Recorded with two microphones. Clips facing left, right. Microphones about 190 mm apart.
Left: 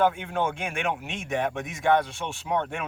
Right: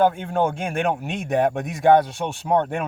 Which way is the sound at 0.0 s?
35° right (ahead or behind).